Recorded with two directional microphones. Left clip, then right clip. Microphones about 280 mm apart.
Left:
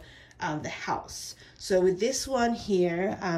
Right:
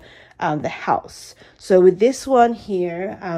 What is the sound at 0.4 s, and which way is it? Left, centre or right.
A woman's voice, centre.